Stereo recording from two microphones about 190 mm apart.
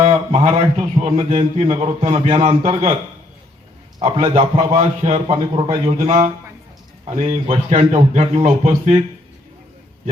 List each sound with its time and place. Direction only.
0.0 s a man's voice: 30° right (ahead or behind)
4.0 s a man's voice: 30° right (ahead or behind)
7.1 s a man's voice: 35° right (ahead or behind)